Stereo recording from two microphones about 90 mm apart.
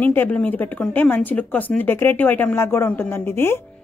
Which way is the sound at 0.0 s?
20° left (ahead or behind).